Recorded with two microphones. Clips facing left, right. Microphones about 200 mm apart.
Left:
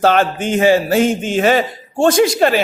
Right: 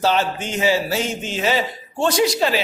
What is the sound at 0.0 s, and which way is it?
A man's voice, 55° left (ahead or behind).